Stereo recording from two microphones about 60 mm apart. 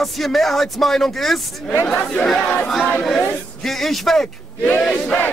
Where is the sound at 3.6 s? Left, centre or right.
Centre.